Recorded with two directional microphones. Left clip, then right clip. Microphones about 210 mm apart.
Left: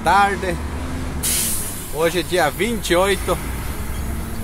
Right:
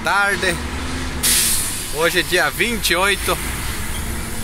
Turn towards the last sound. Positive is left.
turn(degrees=15)  # may be behind; listen again after turning